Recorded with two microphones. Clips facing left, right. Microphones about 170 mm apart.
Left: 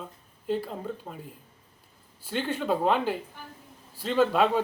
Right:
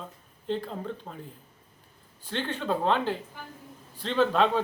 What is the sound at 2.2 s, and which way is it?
Speech, 10° left (ahead or behind).